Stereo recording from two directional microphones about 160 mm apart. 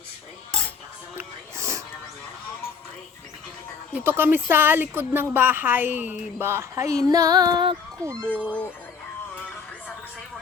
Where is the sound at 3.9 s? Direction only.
15° right (ahead or behind).